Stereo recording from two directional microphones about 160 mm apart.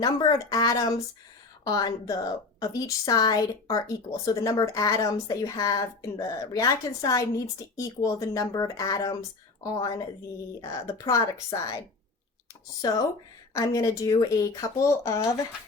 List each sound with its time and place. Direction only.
0.0 s a woman's voice: 25° left (ahead or behind)
13.5 s a woman's voice: 20° left (ahead or behind)